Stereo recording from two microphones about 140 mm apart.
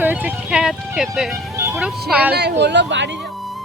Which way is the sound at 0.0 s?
10° right (ahead or behind).